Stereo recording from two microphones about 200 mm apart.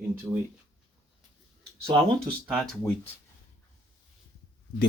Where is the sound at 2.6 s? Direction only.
5° left (ahead or behind).